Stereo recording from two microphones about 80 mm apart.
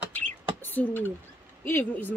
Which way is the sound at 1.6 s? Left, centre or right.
Left.